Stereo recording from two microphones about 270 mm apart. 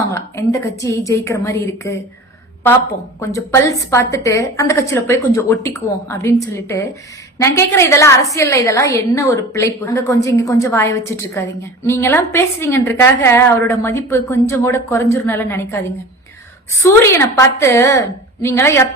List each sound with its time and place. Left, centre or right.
0.1 s a woman's voice: centre
3.2 s a woman's voice: centre
16.8 s a woman's voice: centre